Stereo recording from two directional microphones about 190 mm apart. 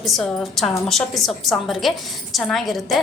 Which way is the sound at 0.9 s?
Centre (ahead or behind).